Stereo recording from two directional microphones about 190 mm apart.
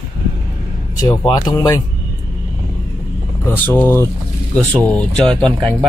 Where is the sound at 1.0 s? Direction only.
20° left (ahead or behind).